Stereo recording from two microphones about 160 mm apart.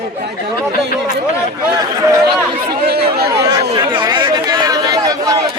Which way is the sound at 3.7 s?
25° right (ahead or behind).